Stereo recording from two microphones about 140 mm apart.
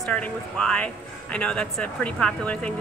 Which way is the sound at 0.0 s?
10° left (ahead or behind).